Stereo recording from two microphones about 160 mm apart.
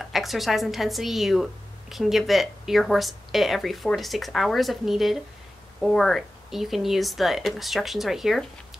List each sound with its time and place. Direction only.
0.0 s speech: centre (ahead or behind)